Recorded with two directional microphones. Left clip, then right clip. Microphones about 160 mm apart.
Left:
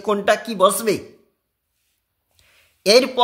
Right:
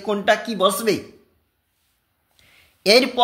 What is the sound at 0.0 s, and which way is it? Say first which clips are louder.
A woman's voice: left 1 dB; 30° left (ahead or behind).